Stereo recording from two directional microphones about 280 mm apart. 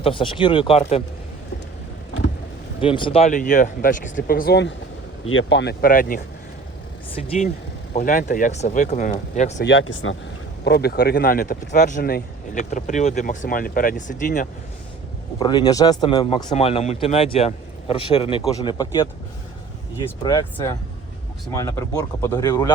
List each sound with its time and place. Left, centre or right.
0.0 s speech: centre
2.8 s speech: centre
9.6 s speech: left
15.4 s speech: centre